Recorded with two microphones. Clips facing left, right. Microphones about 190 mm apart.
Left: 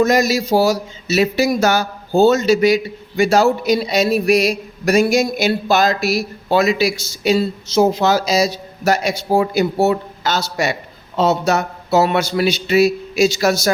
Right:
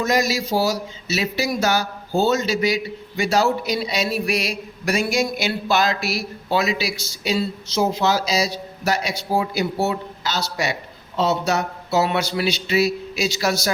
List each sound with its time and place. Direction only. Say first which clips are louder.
0.0 s speech: left 6 dB; 45° left (ahead or behind)